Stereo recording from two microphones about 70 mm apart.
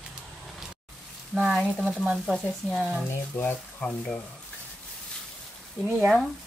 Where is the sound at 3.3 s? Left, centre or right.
Left.